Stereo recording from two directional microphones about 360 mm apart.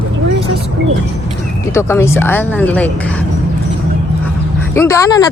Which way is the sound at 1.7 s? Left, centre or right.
Centre.